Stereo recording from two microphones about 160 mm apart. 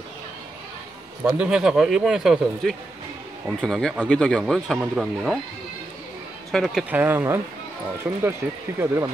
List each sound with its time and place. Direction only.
1.2 s speech: 5° right (ahead or behind)
6.5 s speech: centre (ahead or behind); by 9.1 s 15° right (ahead or behind)